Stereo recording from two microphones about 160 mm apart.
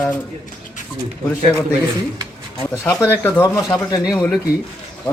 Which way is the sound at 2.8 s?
15° left (ahead or behind).